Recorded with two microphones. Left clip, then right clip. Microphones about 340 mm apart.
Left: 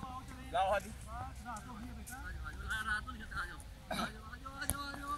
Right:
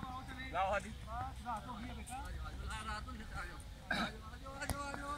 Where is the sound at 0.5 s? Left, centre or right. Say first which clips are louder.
Left 3 dB; left.